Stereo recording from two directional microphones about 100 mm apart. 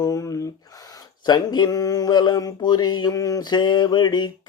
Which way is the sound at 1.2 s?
45° left (ahead or behind).